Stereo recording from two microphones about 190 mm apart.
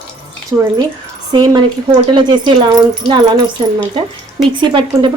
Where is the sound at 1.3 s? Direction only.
20° right (ahead or behind).